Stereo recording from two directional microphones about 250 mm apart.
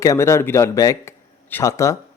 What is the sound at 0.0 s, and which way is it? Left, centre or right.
A man's voice, centre.